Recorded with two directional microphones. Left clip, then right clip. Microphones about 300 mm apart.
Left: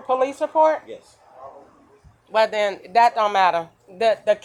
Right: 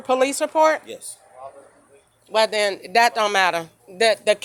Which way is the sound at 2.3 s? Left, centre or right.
Right.